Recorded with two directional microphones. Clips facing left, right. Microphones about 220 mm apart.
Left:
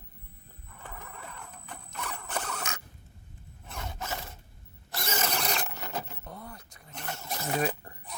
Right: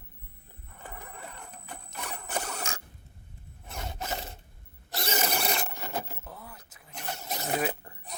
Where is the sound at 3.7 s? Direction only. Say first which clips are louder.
Right 1 dB; 25° right (ahead or behind).